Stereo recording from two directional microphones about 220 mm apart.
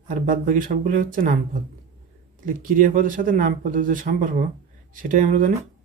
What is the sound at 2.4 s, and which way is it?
Speech, 35° right (ahead or behind).